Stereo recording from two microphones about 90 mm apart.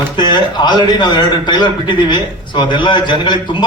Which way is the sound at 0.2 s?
55° left (ahead or behind).